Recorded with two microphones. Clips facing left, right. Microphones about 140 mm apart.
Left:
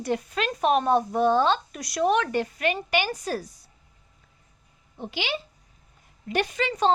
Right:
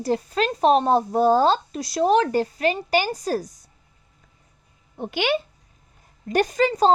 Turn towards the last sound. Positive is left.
turn(degrees=-35)  # may be behind; listen again after turning